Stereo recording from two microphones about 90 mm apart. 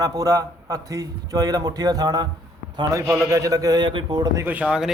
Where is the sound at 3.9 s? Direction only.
60° right (ahead or behind).